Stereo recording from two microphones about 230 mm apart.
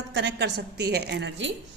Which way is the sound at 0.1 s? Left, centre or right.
Right.